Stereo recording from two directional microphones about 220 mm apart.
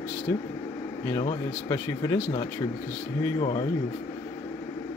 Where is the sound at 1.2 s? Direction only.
15° left (ahead or behind).